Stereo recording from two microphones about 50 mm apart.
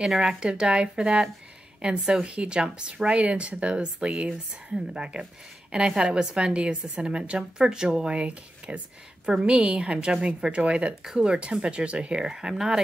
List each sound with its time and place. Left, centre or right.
0.2 s speech: centre